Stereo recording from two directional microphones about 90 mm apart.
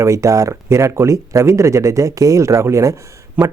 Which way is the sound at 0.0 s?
35° right (ahead or behind).